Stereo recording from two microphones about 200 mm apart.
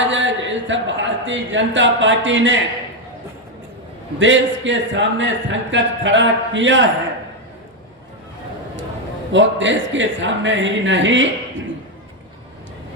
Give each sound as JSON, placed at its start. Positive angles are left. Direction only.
{"t": 0.1, "sound": "a man's voice", "side_deg": -70}
{"t": 4.2, "sound": "speech", "side_deg": -65}
{"t": 9.3, "sound": "speech", "side_deg": -65}